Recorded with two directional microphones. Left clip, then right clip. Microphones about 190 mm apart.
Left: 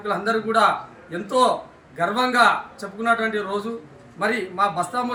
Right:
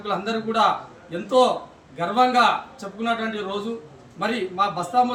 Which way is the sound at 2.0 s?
15° left (ahead or behind).